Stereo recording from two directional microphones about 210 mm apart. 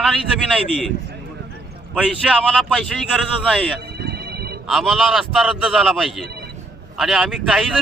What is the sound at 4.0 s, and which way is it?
Music, 50° right (ahead or behind).